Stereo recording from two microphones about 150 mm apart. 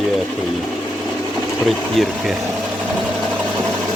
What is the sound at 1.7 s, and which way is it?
Speech, centre (ahead or behind).